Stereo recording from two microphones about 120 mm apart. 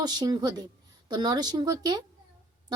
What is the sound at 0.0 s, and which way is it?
Speech, 35° right (ahead or behind).